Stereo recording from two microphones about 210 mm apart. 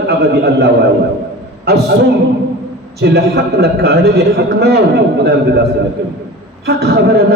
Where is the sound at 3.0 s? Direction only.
50° right (ahead or behind).